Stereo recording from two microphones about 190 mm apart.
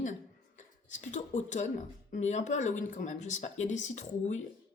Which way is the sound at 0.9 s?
40° left (ahead or behind).